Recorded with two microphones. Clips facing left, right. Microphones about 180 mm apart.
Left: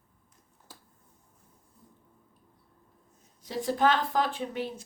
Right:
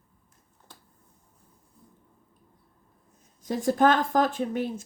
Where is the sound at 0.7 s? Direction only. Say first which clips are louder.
Even; 5° left (ahead or behind).